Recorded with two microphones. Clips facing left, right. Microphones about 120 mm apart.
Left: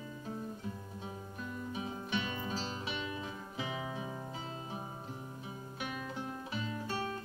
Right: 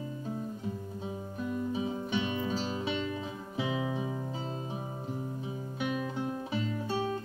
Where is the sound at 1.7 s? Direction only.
25° right (ahead or behind).